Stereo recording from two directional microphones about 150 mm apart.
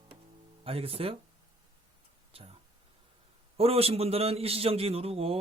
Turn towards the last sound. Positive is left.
turn(degrees=-40)  # may be behind; listen again after turning